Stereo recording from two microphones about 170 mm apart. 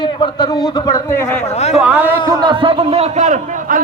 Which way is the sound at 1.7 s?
10° right (ahead or behind).